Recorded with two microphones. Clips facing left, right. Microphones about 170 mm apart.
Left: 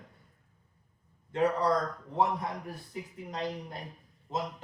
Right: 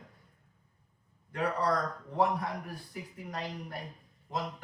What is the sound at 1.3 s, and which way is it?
A man's voice, 20° left (ahead or behind).